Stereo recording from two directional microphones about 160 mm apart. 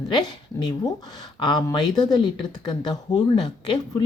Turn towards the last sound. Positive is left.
turn(degrees=30)  # may be behind; listen again after turning